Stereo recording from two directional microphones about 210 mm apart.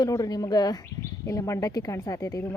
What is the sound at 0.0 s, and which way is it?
Speech, 20° left (ahead or behind).